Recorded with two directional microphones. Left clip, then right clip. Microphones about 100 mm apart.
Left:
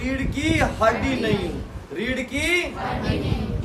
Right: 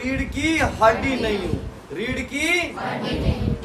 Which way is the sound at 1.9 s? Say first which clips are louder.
Even; centre (ahead or behind).